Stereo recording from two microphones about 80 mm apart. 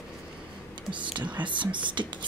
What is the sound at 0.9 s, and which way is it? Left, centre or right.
Whispering, right.